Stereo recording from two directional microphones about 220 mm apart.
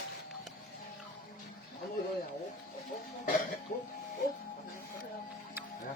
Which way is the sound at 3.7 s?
40° left (ahead or behind).